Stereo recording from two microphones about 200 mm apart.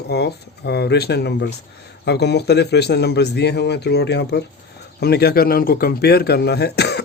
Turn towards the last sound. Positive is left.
turn(degrees=55)  # may be behind; listen again after turning